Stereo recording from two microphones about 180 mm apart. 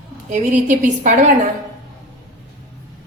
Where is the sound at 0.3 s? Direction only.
45° right (ahead or behind).